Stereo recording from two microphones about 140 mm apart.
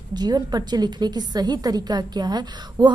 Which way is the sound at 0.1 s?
30° right (ahead or behind).